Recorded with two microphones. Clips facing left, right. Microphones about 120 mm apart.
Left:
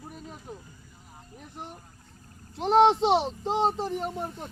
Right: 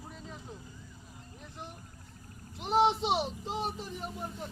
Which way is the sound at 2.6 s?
90° left.